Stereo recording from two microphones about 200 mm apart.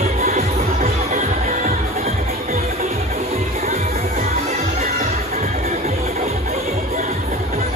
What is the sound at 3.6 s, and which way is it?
Music, 30° right (ahead or behind).